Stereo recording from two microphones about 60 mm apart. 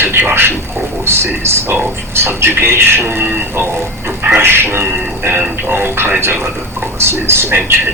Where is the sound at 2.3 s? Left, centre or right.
Right.